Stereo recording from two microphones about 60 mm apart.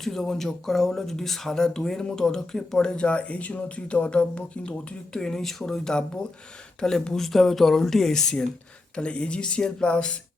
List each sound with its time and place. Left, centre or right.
0.0 s speech: centre